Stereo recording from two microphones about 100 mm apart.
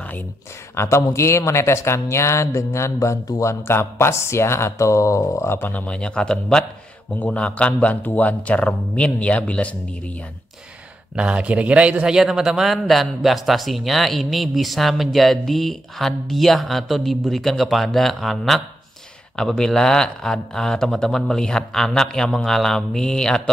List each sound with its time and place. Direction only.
0.7 s a man's voice: 30° left (ahead or behind); by 10.1 s 10° left (ahead or behind)
11.1 s a man's voice: 10° right (ahead or behind); by 23.5 s 5° left (ahead or behind)